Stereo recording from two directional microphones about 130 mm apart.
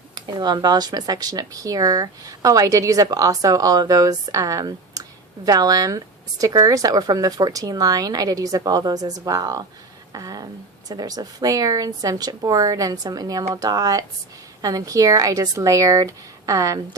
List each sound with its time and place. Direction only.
0.1 s speech: 35° right (ahead or behind)